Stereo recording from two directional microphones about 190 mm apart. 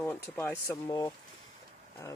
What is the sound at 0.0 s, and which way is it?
Speech, 10° left (ahead or behind).